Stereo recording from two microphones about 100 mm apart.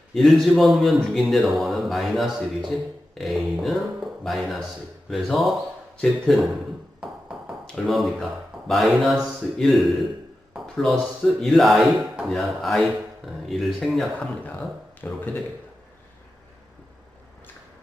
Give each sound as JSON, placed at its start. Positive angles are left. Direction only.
{"t": 0.1, "sound": "a man's voice", "side_deg": 0}
{"t": 7.0, "sound": "ping", "side_deg": -10}
{"t": 7.9, "sound": "a man's voice", "side_deg": 0}
{"t": 15.0, "sound": "speech", "side_deg": 15}